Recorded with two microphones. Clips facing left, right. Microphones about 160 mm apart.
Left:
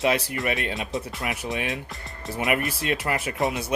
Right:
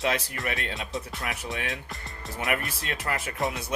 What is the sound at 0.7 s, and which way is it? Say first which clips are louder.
Speech: left 4 dB; centre (ahead or behind).